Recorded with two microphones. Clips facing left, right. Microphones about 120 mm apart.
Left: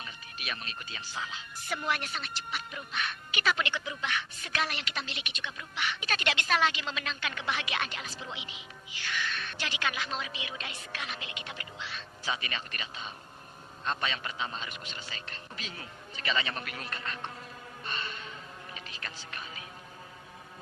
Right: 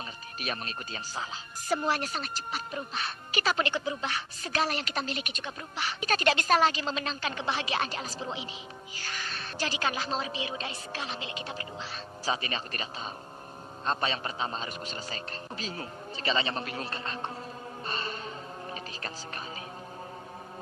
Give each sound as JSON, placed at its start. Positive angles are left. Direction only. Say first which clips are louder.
{"t": 0.3, "sound": "speech", "louder": "right 5 dB", "side_deg": -40}
{"t": 17.8, "sound": "music", "louder": "right 3 dB", "side_deg": -35}